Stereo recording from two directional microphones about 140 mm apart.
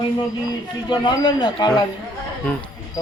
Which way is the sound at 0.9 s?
35° left (ahead or behind).